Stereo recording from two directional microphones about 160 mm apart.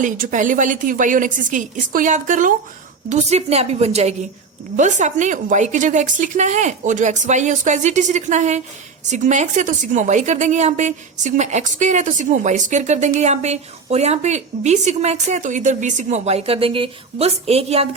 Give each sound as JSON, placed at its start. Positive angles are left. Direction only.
{"t": 0.0, "sound": "a woman's voice", "side_deg": -50}
{"t": 3.1, "sound": "a woman's voice", "side_deg": -40}